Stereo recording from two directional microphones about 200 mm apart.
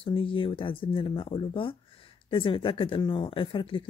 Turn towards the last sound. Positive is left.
turn(degrees=25)  # may be behind; listen again after turning